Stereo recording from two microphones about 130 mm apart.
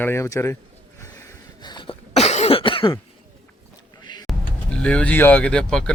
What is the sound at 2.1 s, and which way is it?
Cough, 55° left (ahead or behind).